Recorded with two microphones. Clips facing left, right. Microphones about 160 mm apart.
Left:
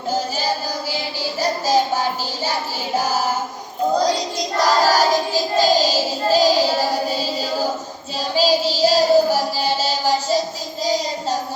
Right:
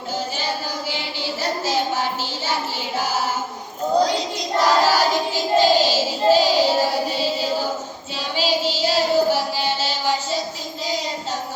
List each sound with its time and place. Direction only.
0.9 s child singing: 40° left (ahead or behind)
2.5 s music: 40° left (ahead or behind)
4.0 s child singing: 40° left (ahead or behind)
8.4 s child singing: 40° left (ahead or behind)